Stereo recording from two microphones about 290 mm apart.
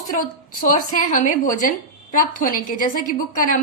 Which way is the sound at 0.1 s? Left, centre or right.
Left.